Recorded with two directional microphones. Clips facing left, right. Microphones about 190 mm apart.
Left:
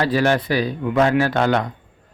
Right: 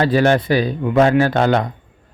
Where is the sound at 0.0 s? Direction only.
25° right (ahead or behind).